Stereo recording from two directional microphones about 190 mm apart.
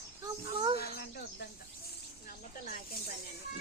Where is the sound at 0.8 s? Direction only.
55° left (ahead or behind).